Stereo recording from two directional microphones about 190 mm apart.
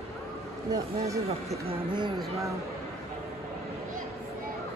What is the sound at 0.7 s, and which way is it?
Speech, 15° right (ahead or behind).